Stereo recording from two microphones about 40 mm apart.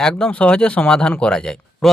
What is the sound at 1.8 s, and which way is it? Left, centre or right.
Speech, centre.